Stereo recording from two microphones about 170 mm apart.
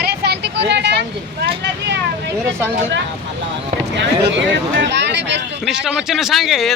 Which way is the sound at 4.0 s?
90° right.